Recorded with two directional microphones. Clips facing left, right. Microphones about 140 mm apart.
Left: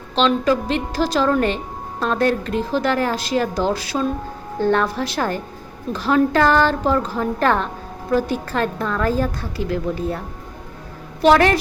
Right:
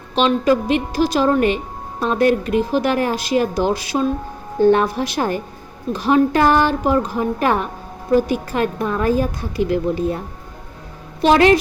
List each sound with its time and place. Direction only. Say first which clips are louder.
0.2 s a woman's voice: right 2 dB; 15° right (ahead or behind)
11.2 s speech: right 1 dB; 20° right (ahead or behind)